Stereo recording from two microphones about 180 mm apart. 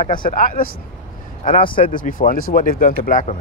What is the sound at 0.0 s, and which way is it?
Speech, 50° left (ahead or behind).